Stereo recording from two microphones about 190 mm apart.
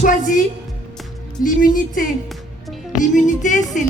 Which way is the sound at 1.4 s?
45° left (ahead or behind).